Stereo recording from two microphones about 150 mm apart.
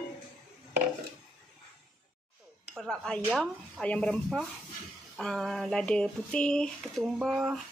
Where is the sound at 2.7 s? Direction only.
5° left (ahead or behind).